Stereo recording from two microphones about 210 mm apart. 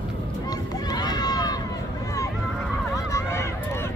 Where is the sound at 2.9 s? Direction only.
15° left (ahead or behind).